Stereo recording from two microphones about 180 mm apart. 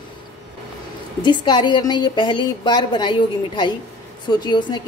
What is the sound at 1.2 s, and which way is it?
A woman's voice, 25° left (ahead or behind).